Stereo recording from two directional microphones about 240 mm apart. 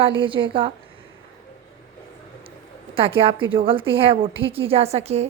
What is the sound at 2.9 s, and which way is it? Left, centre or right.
A woman's voice, right.